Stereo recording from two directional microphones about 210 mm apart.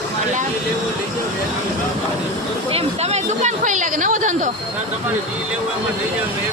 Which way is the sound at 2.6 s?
30° right (ahead or behind).